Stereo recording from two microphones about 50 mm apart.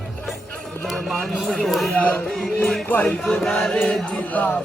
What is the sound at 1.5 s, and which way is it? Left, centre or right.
Chant, centre.